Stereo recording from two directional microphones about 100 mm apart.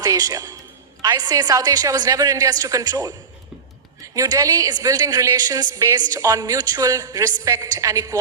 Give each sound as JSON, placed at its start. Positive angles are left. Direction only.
{"t": 0.0, "sound": "a woman's voice", "side_deg": -40}